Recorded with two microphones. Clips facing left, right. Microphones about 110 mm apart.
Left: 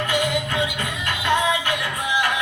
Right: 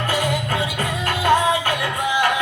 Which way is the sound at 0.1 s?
35° right (ahead or behind).